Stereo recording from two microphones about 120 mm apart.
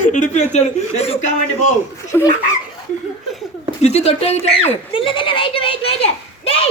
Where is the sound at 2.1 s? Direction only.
20° left (ahead or behind).